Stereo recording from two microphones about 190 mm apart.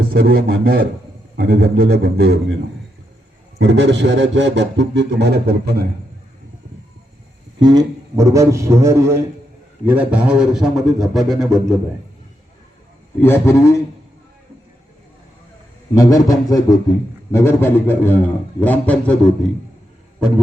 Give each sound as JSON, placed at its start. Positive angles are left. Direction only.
{"t": 0.0, "sound": "a man's voice", "side_deg": -55}
{"t": 1.4, "sound": "a man's voice", "side_deg": -65}
{"t": 3.6, "sound": "a man's voice", "side_deg": -70}
{"t": 7.6, "sound": "a man's voice", "side_deg": -20}
{"t": 13.2, "sound": "a man's voice", "side_deg": 15}
{"t": 16.0, "sound": "a man's voice", "side_deg": 20}